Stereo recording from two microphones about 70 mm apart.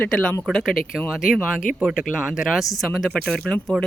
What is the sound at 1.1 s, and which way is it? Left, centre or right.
Speech, centre.